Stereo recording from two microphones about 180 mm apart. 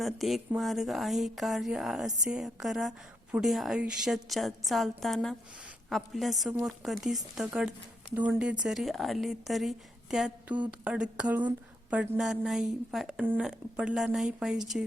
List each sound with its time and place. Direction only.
0.0 s speech: centre (ahead or behind)